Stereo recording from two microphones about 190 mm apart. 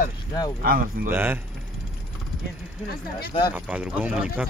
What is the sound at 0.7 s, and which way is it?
Speech, 50° right (ahead or behind).